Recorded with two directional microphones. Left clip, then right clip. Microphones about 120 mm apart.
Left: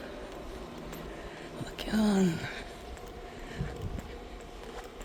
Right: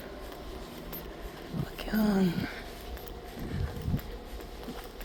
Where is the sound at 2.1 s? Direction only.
50° left (ahead or behind).